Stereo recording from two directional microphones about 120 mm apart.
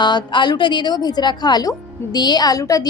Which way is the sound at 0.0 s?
40° left (ahead or behind).